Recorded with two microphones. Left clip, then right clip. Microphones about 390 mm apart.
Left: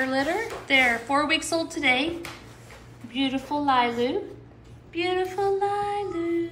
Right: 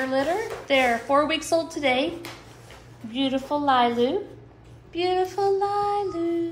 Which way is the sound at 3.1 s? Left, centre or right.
Right.